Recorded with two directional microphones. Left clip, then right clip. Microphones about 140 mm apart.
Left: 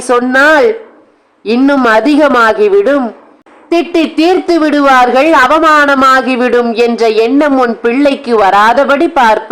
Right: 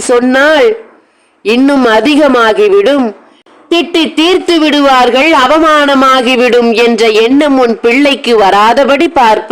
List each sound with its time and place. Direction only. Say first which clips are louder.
0.1 s a man's voice: even; 20° right (ahead or behind)
1.5 s a man's voice: right 1 dB; 15° right (ahead or behind)